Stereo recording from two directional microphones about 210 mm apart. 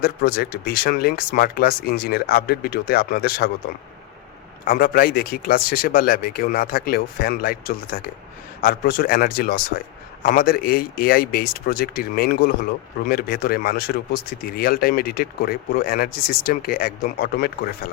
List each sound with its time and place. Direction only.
0.0 s speech: 45° left (ahead or behind)
4.6 s speech: 45° left (ahead or behind)